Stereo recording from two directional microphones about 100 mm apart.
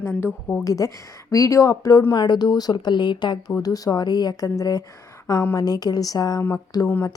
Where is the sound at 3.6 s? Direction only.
40° left (ahead or behind).